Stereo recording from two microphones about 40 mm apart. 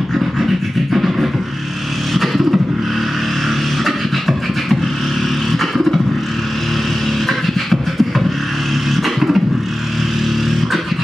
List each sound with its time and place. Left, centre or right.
0.9 s beatboxing: centre
2.1 s vehicle: centre
3.8 s beatboxing: centre
7.2 s beatboxing: centre